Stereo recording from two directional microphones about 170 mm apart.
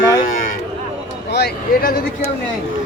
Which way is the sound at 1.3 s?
75° left (ahead or behind).